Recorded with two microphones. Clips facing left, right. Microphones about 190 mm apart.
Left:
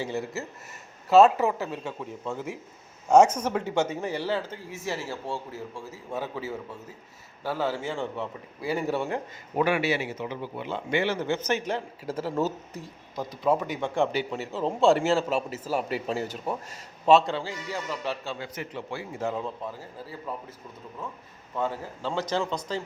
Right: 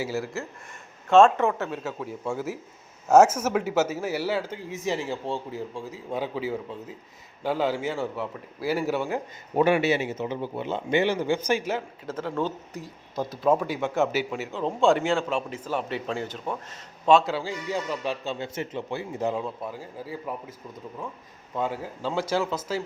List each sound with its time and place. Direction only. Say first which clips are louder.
0.0 s a man's voice: right 1 dB; centre (ahead or behind)
9.6 s a man's voice: right 4 dB; 25° right (ahead or behind); by 11.8 s 10° right (ahead or behind)
12.0 s a man's voice: left 2 dB; 10° left (ahead or behind)
17.4 s a man's voice: right 4 dB; 15° right (ahead or behind)
21.5 s speech: right 1 dB; 15° right (ahead or behind)